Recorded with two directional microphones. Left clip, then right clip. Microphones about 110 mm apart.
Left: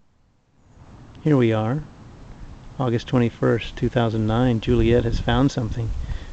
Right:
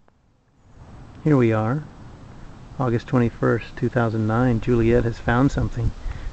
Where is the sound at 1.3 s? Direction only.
10° left (ahead or behind).